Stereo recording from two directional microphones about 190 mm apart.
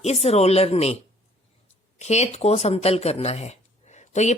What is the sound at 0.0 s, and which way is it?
Speech, 35° left (ahead or behind).